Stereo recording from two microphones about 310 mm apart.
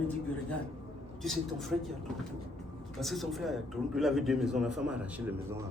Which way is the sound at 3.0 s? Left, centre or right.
Centre.